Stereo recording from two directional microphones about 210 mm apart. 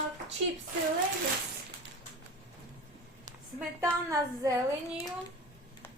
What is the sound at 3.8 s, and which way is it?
Speech, 15° right (ahead or behind).